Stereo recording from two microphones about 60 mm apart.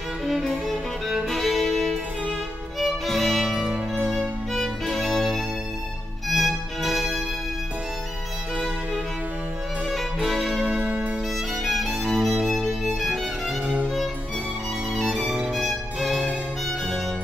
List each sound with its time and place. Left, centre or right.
0.3 s music: centre
3.5 s music: centre
3.9 s music: centre
9.8 s music: centre
10.6 s music: right
11.6 s violin: centre
13.7 s music: centre
15.0 s violin: centre
15.2 s music: centre
15.5 s music: centre